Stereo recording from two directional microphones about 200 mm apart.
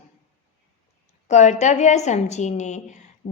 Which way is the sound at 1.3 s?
35° left (ahead or behind).